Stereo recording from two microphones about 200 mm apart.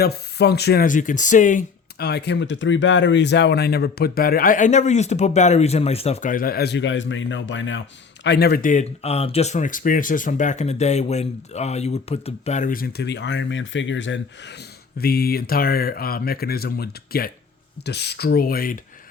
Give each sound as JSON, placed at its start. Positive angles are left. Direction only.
{"t": 0.0, "sound": "speech", "side_deg": 55}
{"t": 2.0, "sound": "speech", "side_deg": 55}
{"t": 8.2, "sound": "speech", "side_deg": 55}
{"t": 14.9, "sound": "speech", "side_deg": 50}